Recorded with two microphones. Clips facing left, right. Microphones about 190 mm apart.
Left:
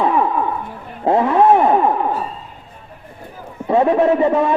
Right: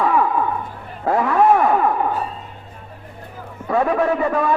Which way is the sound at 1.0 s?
25° left (ahead or behind).